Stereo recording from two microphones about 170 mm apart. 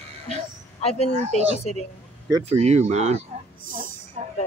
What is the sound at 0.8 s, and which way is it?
Speech, 35° left (ahead or behind).